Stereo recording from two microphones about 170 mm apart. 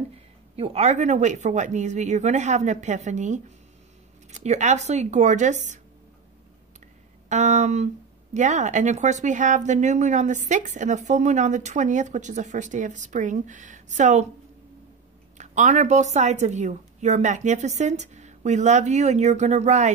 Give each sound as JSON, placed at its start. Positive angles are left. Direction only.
{"t": 0.6, "sound": "speech", "side_deg": -40}
{"t": 7.2, "sound": "speech", "side_deg": -45}
{"t": 15.3, "sound": "speech", "side_deg": -45}